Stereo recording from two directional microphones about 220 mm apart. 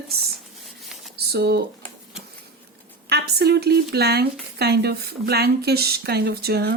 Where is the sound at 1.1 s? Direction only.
45° right (ahead or behind).